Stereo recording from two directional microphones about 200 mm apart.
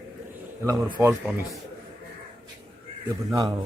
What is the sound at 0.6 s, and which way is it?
Speech, 15° right (ahead or behind).